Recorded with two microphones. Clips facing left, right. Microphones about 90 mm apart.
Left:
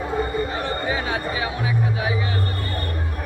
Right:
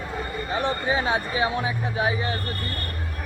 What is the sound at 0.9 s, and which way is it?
Speech, 25° right (ahead or behind).